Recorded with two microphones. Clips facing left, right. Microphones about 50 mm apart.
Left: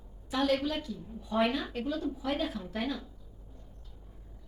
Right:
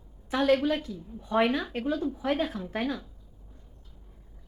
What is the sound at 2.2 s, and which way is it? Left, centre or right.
Speech, right.